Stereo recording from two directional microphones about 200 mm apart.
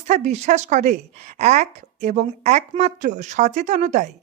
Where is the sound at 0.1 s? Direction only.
35° right (ahead or behind).